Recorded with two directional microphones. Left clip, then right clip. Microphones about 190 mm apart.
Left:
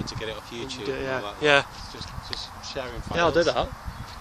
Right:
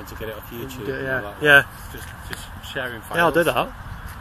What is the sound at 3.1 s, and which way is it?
Speech, 5° right (ahead or behind).